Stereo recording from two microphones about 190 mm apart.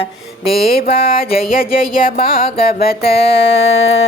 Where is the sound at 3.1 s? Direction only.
30° left (ahead or behind).